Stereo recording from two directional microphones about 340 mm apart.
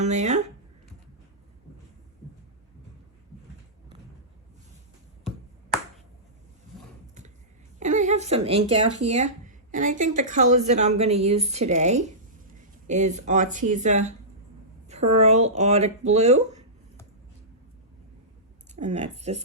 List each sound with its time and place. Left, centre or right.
0.0 s a woman's voice: centre
7.8 s a woman's voice: right
18.8 s a woman's voice: centre